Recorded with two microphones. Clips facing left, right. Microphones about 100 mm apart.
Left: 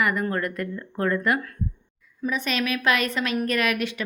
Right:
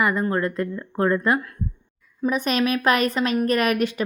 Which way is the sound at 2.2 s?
40° right (ahead or behind).